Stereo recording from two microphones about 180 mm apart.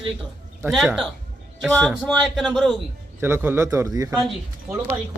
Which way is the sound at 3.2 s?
10° right (ahead or behind).